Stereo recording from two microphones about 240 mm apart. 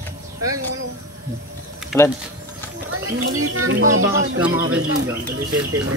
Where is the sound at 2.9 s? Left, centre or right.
Right.